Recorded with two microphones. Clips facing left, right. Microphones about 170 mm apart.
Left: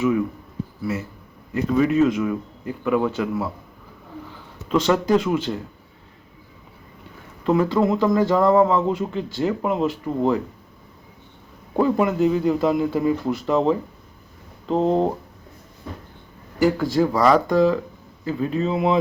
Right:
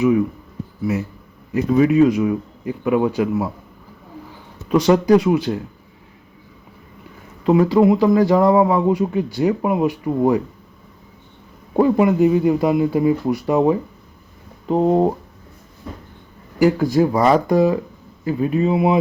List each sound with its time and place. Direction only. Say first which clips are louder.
1.5 s speech: right 4 dB; 15° right (ahead or behind)
4.7 s speech: right 5 dB; 10° right (ahead or behind)
7.4 s speech: right 5 dB; 15° right (ahead or behind)
11.8 s speech: right 4 dB; 10° right (ahead or behind)
16.8 s speech: right 3 dB; 15° right (ahead or behind)